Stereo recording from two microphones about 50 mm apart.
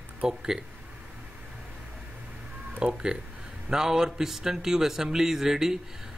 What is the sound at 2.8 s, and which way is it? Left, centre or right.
Speech, centre.